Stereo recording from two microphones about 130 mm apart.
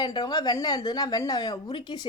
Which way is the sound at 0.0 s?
35° left (ahead or behind).